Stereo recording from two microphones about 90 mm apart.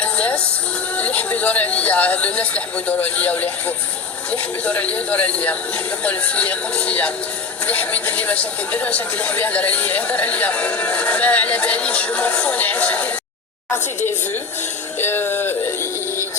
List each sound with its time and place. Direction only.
0.0 s music: 15° left (ahead or behind)
0.9 s speech: 15° left (ahead or behind)
14.9 s music: 25° left (ahead or behind)